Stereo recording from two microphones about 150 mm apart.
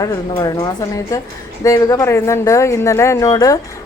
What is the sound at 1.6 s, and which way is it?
A woman's voice, 25° left (ahead or behind).